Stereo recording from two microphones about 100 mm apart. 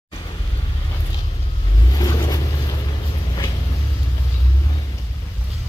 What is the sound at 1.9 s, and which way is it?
Vehicle, 40° left (ahead or behind).